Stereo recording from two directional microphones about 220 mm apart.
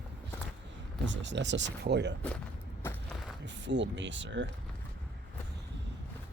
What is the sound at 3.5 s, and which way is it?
Speech, 55° right (ahead or behind).